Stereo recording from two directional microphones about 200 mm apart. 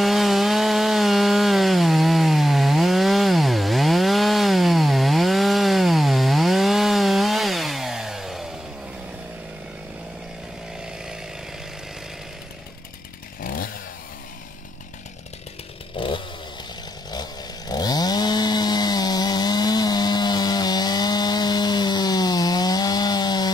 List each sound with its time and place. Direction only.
0.0 s wood: centre (ahead or behind)
13.4 s chainsaw: 45° left (ahead or behind)
16.0 s chainsaw: 25° left (ahead or behind)